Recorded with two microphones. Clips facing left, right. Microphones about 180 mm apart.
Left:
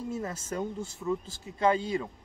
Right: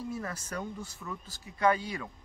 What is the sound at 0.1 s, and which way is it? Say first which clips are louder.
Speech: left 3 dB; 25° left (ahead or behind).